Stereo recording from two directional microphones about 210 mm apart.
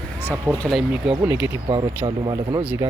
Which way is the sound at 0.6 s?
Centre (ahead or behind).